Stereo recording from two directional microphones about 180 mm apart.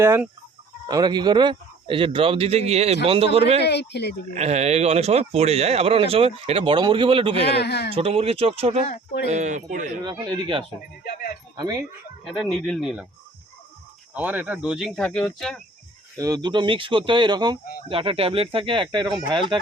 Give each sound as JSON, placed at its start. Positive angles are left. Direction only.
{"t": 0.0, "sound": "chicken", "side_deg": -15}
{"t": 0.9, "sound": "a man's voice", "side_deg": -20}
{"t": 3.6, "sound": "speech", "side_deg": 70}
{"t": 4.4, "sound": "speech", "side_deg": -40}
{"t": 7.4, "sound": "speech", "side_deg": 70}
{"t": 7.9, "sound": "speech", "side_deg": -35}
{"t": 10.0, "sound": "a man's voice", "side_deg": -25}
{"t": 11.0, "sound": "speech", "side_deg": 55}
{"t": 11.5, "sound": "speech", "side_deg": -20}
{"t": 12.2, "sound": "speech", "side_deg": 0}
{"t": 14.1, "sound": "speech", "side_deg": -10}
{"t": 16.1, "sound": "a man's voice", "side_deg": -20}